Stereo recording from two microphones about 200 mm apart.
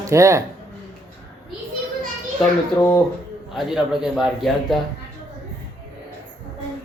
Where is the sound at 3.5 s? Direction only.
Centre (ahead or behind).